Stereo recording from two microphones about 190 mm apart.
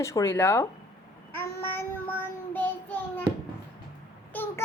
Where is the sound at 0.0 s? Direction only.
15° left (ahead or behind).